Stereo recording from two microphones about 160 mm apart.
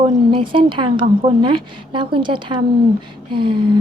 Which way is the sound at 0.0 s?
30° right (ahead or behind).